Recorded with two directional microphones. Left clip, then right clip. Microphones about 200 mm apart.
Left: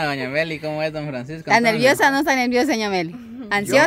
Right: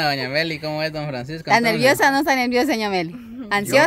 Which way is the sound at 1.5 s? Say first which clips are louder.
Left 1 dB; centre (ahead or behind).